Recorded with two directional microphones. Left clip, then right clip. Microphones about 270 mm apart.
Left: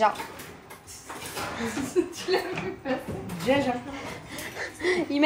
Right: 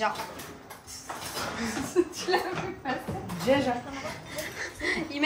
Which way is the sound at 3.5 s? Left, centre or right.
Centre.